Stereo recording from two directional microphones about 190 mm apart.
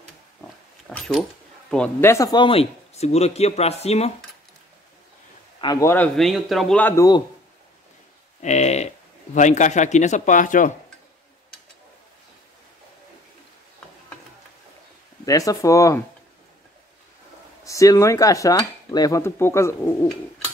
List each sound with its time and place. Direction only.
0.8 s speech: 5° left (ahead or behind); by 4.1 s 35° left (ahead or behind)
5.6 s dishes: 20° left (ahead or behind)
6.1 s speech: centre (ahead or behind)
8.4 s speech: 35° left (ahead or behind)
15.2 s dishes: 20° left (ahead or behind)
17.6 s dishes: 15° left (ahead or behind)